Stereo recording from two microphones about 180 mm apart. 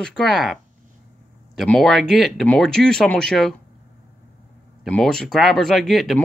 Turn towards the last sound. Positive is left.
turn(degrees=0)  # may be behind; listen again after turning